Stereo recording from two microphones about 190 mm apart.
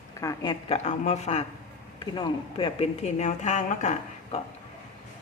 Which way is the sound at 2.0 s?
25° left (ahead or behind).